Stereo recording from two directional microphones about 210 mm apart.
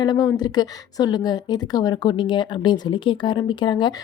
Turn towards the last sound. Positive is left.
turn(degrees=20)  # may be behind; listen again after turning